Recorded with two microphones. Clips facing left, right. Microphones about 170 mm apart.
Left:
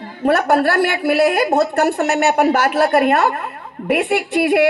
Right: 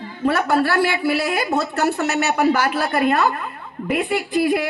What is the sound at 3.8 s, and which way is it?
Speech, 75° left (ahead or behind).